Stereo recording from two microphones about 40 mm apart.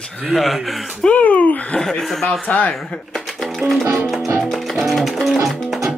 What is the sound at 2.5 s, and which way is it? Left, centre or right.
Speech, left.